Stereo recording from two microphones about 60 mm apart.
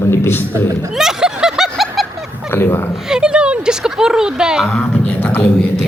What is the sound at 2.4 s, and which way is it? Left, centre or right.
Speech, left.